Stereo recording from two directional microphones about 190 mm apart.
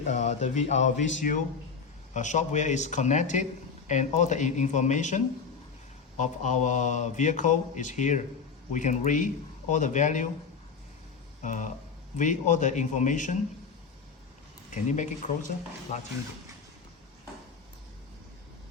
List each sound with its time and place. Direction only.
0.0 s speech: 40° left (ahead or behind)
11.4 s speech: 40° left (ahead or behind)
14.7 s speech: 40° left (ahead or behind)